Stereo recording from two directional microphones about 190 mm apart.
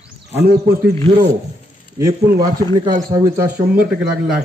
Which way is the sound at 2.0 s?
20° right (ahead or behind).